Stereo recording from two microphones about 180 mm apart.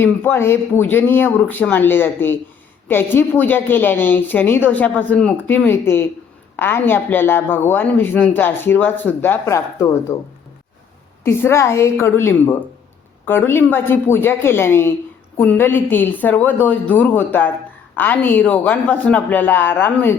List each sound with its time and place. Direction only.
0.0 s speech: 10° left (ahead or behind)